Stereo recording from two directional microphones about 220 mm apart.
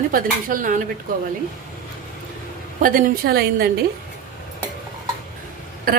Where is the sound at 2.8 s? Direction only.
40° right (ahead or behind).